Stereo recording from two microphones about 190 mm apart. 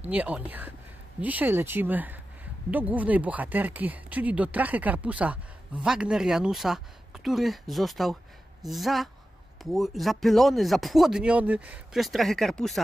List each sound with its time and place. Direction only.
0.1 s speech: 10° right (ahead or behind)